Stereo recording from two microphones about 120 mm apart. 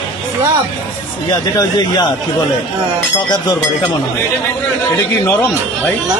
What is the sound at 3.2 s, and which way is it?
Speech, 35° left (ahead or behind).